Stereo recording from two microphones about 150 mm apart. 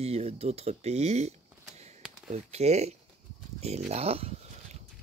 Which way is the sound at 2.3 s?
45° right (ahead or behind).